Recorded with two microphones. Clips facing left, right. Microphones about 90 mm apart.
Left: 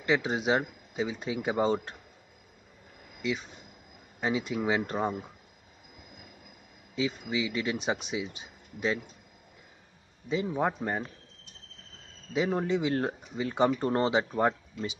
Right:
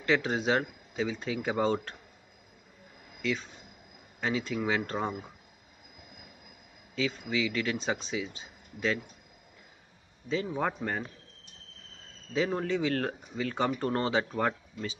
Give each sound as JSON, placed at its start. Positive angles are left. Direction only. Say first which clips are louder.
{"t": 0.0, "sound": "speech", "louder": "even", "side_deg": 15}
{"t": 3.2, "sound": "a man's voice", "louder": "even", "side_deg": 15}
{"t": 7.0, "sound": "speech", "louder": "even", "side_deg": 20}
{"t": 10.2, "sound": "speech", "louder": "left 2 dB", "side_deg": 15}
{"t": 12.3, "sound": "speech", "louder": "left 1 dB", "side_deg": 15}